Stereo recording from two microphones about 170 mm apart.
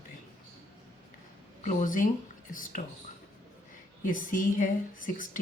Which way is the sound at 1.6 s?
50° left (ahead or behind).